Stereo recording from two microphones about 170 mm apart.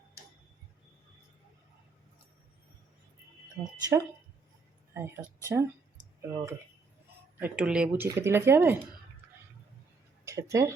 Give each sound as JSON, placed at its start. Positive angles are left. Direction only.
{"t": 3.6, "sound": "speech", "side_deg": -20}
{"t": 8.0, "sound": "speech", "side_deg": -15}
{"t": 10.2, "sound": "speech", "side_deg": -15}